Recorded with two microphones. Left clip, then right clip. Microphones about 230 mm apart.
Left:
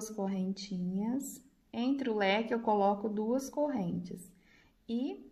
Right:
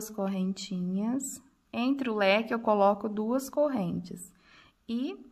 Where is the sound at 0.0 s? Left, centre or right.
Right.